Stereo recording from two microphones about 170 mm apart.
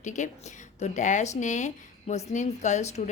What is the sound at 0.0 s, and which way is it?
A woman's voice, 45° left (ahead or behind).